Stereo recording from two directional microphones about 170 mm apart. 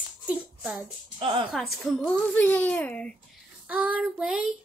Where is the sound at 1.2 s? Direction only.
30° right (ahead or behind).